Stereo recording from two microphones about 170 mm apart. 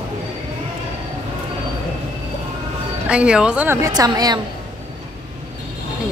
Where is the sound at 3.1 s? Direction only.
5° right (ahead or behind); by 4.4 s 25° right (ahead or behind).